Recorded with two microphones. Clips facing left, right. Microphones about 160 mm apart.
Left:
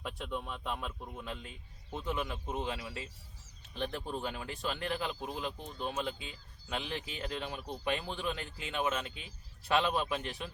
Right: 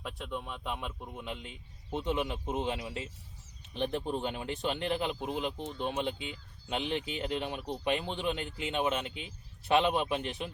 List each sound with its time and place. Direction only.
0.0 s speech: centre (ahead or behind)
1.2 s speech: 20° right (ahead or behind)